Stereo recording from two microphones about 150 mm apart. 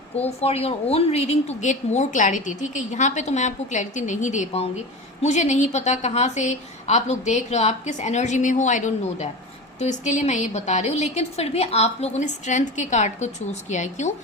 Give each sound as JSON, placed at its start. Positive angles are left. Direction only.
{"t": 0.3, "sound": "a woman's voice", "side_deg": 45}